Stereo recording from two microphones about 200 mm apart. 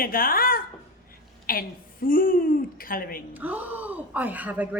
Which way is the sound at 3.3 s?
10° right (ahead or behind).